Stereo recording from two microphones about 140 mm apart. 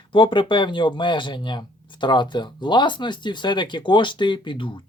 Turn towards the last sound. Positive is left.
turn(degrees=35)  # may be behind; listen again after turning